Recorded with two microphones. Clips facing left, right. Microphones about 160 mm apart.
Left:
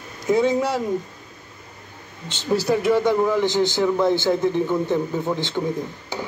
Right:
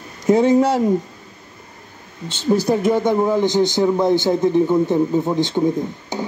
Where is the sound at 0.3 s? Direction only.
45° right (ahead or behind).